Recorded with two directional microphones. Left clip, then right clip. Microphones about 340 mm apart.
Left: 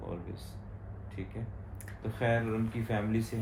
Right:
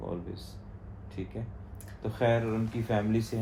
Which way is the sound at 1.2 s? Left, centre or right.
Centre.